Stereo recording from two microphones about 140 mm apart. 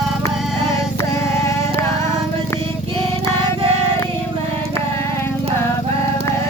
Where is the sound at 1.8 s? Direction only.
20° left (ahead or behind).